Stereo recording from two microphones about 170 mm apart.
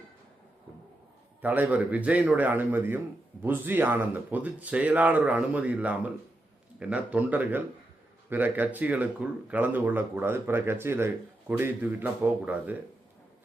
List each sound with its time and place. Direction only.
1.4 s speech: 10° right (ahead or behind)